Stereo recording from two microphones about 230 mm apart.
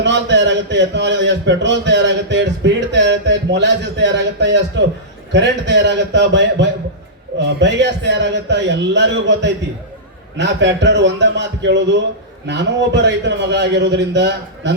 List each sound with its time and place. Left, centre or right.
0.0 s a man's voice: right